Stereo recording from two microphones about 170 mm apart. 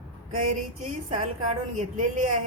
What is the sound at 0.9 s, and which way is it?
A woman's voice, 50° right (ahead or behind).